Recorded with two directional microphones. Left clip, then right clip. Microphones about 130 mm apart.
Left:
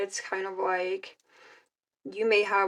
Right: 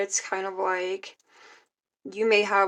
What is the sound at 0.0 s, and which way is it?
A woman's voice, 45° right (ahead or behind).